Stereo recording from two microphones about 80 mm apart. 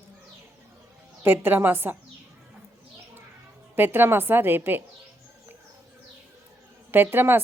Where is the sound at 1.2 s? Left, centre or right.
Right.